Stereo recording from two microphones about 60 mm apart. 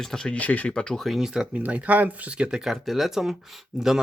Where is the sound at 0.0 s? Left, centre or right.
Centre.